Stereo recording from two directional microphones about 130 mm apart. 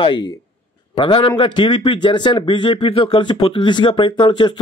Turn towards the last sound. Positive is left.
turn(degrees=40)  # may be behind; listen again after turning